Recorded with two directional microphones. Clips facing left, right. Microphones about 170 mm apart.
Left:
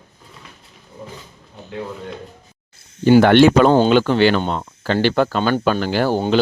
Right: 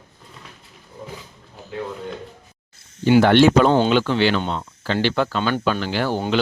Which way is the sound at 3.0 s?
50° left (ahead or behind).